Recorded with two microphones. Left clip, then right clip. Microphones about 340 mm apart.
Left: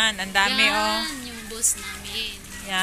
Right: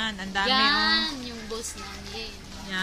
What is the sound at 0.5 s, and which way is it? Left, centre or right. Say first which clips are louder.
Speech: left 1 dB; right.